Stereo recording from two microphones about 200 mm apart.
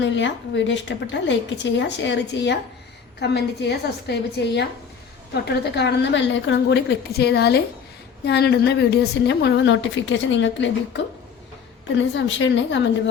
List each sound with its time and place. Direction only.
0.0 s a woman's voice: 65° left (ahead or behind)